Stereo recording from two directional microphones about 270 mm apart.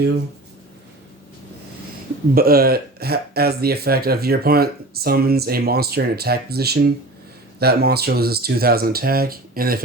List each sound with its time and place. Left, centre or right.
2.3 s speech: right